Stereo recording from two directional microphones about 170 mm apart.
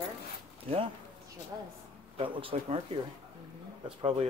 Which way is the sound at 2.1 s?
30° right (ahead or behind).